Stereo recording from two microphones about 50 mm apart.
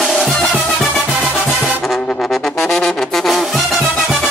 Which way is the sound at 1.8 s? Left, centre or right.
Centre.